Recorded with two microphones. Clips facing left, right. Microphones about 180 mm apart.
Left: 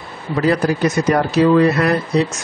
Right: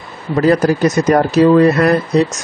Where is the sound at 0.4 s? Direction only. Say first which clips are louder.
Right 4 dB; 45° right (ahead or behind).